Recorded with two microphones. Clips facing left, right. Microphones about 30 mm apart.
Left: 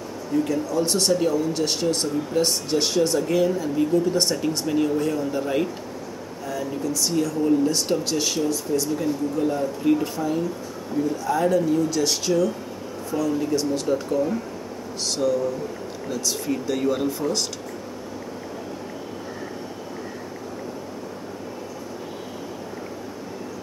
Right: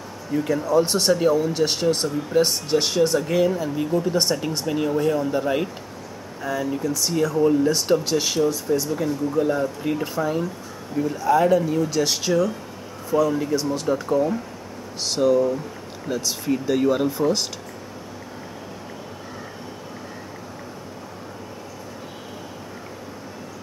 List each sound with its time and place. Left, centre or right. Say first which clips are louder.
0.3 s speech: right 2 dB; centre